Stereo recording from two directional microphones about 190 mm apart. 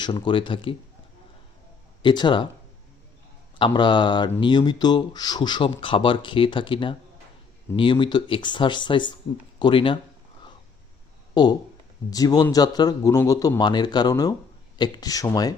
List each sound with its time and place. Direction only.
0.0 s speech: 25° left (ahead or behind)
2.0 s speech: 25° left (ahead or behind)
3.6 s speech: 25° left (ahead or behind)
11.3 s speech: 20° left (ahead or behind)